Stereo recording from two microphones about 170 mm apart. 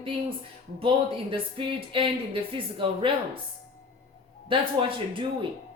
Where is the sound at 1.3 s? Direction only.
30° right (ahead or behind).